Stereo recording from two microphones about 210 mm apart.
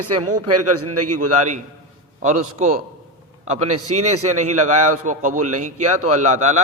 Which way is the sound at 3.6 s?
90° right.